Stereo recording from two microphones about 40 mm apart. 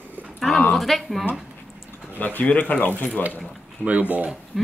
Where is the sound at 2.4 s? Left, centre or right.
Left.